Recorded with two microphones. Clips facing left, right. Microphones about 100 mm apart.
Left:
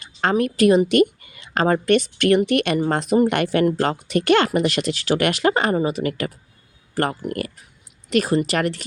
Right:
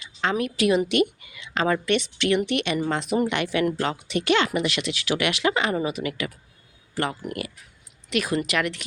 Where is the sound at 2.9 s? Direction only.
40° left (ahead or behind).